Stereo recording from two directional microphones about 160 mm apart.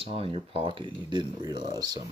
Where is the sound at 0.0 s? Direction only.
35° right (ahead or behind).